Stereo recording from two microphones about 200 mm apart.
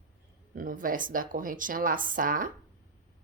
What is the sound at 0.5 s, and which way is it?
Speech, 45° right (ahead or behind).